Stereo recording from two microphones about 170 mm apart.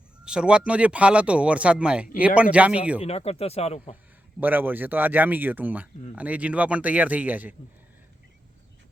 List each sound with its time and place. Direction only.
0.3 s speech: 5° right (ahead or behind)
3.0 s speech: 35° left (ahead or behind)
4.4 s speech: 10° right (ahead or behind)